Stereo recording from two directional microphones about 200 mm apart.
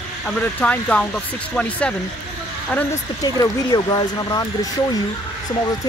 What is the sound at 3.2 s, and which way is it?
Speech, 20° left (ahead or behind).